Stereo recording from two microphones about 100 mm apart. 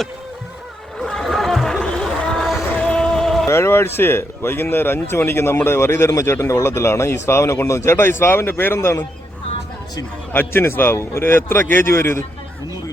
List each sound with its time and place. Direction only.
0.9 s a sound: 5° left (ahead or behind)
2.7 s music: 10° left (ahead or behind)
3.5 s a man's voice: 25° left (ahead or behind)
10.3 s a man's voice: 25° left (ahead or behind)